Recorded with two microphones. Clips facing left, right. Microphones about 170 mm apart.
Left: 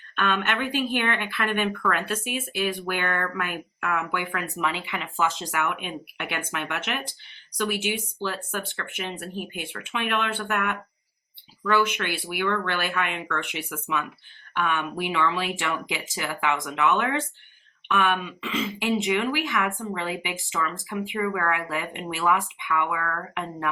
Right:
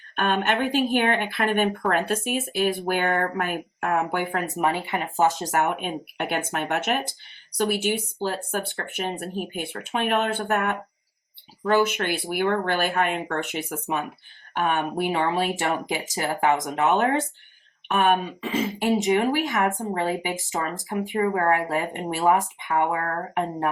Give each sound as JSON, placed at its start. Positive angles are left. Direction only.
{"t": 0.2, "sound": "speech", "side_deg": -45}